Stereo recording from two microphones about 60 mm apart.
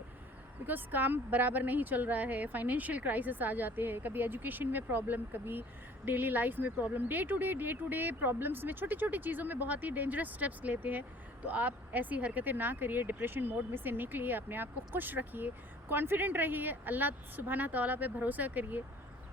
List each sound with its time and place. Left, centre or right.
0.6 s speech: right